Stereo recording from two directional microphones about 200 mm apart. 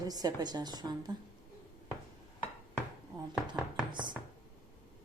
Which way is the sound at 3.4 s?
Centre (ahead or behind).